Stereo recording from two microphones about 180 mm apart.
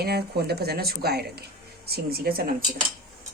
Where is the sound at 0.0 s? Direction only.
60° right (ahead or behind).